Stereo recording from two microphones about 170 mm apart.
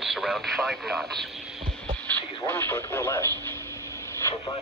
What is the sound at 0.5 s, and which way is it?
Speech, centre (ahead or behind).